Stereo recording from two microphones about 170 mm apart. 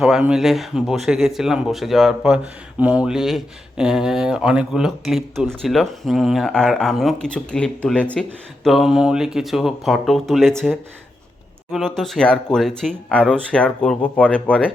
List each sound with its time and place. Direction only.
0.0 s speech: 5° right (ahead or behind)
11.7 s speech: centre (ahead or behind)